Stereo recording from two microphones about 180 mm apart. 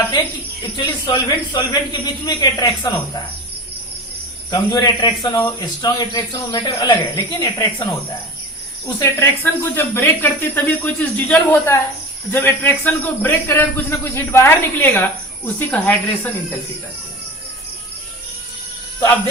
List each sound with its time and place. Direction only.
0.8 s a man's voice: 25° left (ahead or behind)
4.7 s a man's voice: 25° left (ahead or behind)
9.0 s speech: 10° left (ahead or behind)